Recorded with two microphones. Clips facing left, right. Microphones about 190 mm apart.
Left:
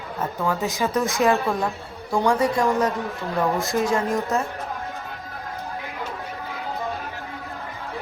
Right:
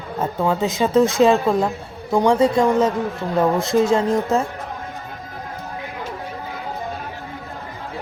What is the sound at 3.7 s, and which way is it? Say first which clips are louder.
Speech: right 7 dB; 20° right (ahead or behind).